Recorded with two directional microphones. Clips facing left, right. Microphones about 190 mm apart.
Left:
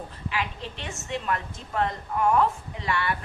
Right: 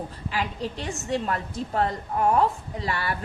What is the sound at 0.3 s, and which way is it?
A woman's voice, 35° right (ahead or behind).